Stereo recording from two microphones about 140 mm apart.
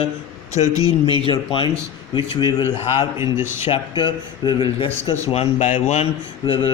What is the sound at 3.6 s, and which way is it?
Speech, 35° left (ahead or behind).